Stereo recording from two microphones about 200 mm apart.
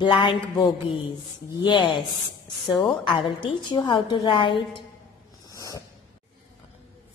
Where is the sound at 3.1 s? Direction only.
20° left (ahead or behind).